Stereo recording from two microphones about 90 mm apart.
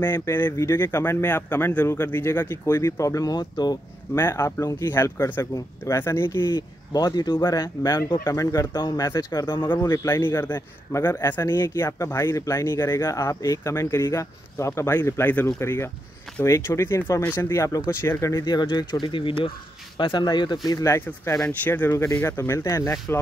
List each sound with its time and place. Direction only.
0.0 s speech: 25° left (ahead or behind); by 3.7 s 50° left (ahead or behind)
4.1 s a man's voice: 30° left (ahead or behind)
6.5 s a man's voice: 45° left (ahead or behind)
18.4 s speech: 50° left (ahead or behind); by 19.5 s 75° left (ahead or behind)
20.0 s speech: 60° left (ahead or behind)
20.6 s a man's voice: 35° left (ahead or behind)
21.5 s speech: 20° left (ahead or behind)
21.9 s a man's voice: 35° left (ahead or behind)